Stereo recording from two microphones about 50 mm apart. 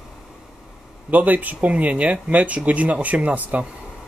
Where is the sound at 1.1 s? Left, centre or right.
Right.